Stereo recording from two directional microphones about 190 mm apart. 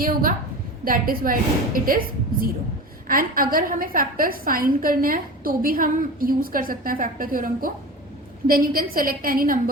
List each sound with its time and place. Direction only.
0.0 s a woman's voice: 50° right (ahead or behind)
3.1 s a woman's voice: 50° right (ahead or behind)